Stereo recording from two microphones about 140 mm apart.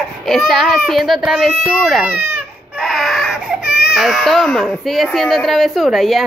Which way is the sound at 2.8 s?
Centre (ahead or behind).